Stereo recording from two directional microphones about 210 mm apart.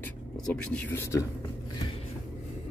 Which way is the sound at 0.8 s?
10° left (ahead or behind).